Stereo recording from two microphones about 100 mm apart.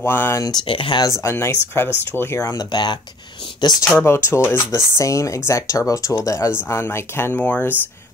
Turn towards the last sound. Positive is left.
turn(degrees=20)  # may be behind; listen again after turning